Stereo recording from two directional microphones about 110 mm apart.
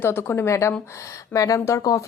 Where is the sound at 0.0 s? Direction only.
20° left (ahead or behind).